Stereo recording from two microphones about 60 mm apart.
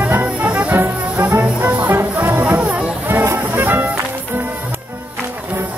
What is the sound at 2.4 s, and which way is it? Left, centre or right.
Music, right.